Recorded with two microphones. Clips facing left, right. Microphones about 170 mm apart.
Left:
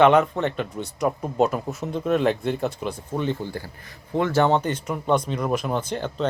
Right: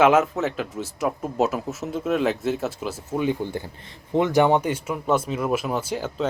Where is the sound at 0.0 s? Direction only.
5° right (ahead or behind).